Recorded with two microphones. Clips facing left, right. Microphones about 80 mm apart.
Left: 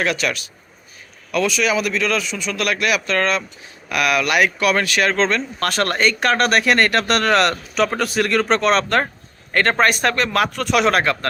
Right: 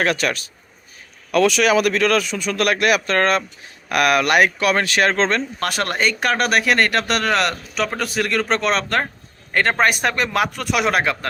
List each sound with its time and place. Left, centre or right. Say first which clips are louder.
0.0 s speech: right 1 dB; right
1.3 s speech: right 3 dB; right
5.5 s speech: left 2 dB; centre